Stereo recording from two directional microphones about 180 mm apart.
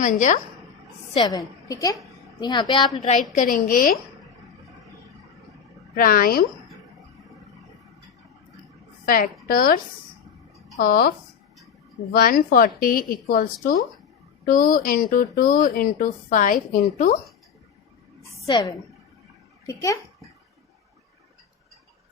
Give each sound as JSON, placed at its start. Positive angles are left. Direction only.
{"t": 0.0, "sound": "speech", "side_deg": 45}
{"t": 1.1, "sound": "a woman's voice", "side_deg": 20}
{"t": 3.3, "sound": "speech", "side_deg": 50}
{"t": 5.9, "sound": "speech", "side_deg": 55}
{"t": 9.0, "sound": "a woman's voice", "side_deg": 50}
{"t": 12.1, "sound": "speech", "side_deg": 55}
{"t": 18.3, "sound": "a sound", "side_deg": 25}
{"t": 19.6, "sound": "a woman's voice", "side_deg": 20}